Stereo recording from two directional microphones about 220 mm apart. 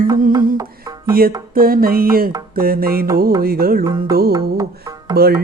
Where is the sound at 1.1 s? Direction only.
40° right (ahead or behind).